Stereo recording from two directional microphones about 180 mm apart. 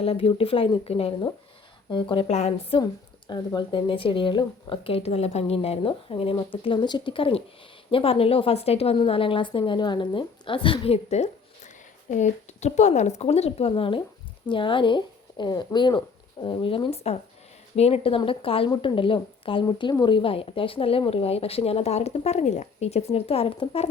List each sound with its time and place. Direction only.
0.0 s a woman's voice: 30° left (ahead or behind)
3.2 s a woman's voice: 25° left (ahead or behind)